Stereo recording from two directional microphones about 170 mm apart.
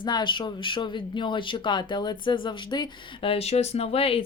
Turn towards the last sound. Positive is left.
turn(degrees=35)  # may be behind; listen again after turning